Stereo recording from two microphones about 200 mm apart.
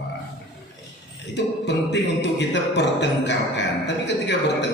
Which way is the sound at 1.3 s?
60° left (ahead or behind).